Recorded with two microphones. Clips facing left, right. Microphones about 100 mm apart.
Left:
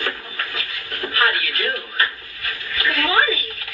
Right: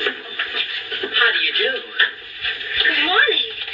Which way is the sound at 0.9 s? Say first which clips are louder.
Even; 40° left (ahead or behind).